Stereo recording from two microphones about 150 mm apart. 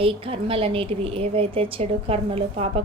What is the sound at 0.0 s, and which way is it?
A woman's voice, 40° right (ahead or behind).